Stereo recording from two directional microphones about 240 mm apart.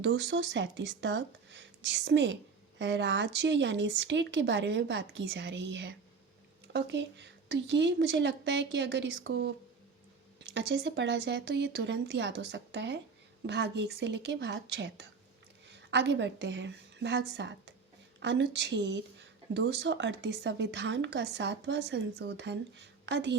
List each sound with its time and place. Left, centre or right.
0.0 s a woman's voice: right